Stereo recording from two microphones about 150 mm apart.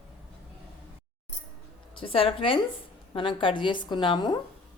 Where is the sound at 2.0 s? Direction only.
40° left (ahead or behind).